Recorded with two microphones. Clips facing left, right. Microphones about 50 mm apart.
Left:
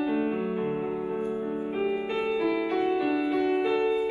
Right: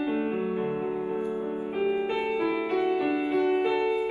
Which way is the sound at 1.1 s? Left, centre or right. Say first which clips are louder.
Even; right.